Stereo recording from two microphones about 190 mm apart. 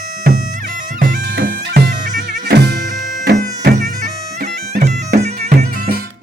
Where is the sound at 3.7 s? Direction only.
40° right (ahead or behind).